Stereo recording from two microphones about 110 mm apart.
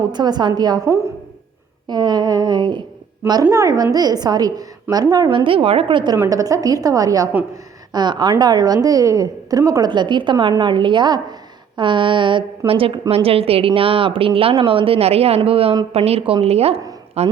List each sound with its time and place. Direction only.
0.1 s a woman's voice: 40° right (ahead or behind)
1.9 s a woman's voice: 40° right (ahead or behind)
6.2 s a woman's voice: 35° right (ahead or behind)
9.9 s a woman's voice: 45° right (ahead or behind); by 17.3 s 70° right (ahead or behind)